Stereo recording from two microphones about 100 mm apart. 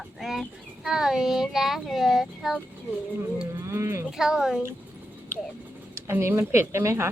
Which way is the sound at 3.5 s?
25° right (ahead or behind).